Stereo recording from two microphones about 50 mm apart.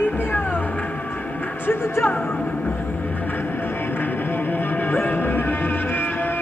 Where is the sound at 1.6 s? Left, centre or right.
Left.